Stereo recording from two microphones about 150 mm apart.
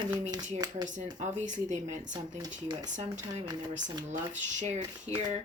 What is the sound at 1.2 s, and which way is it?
Speech, 50° right (ahead or behind).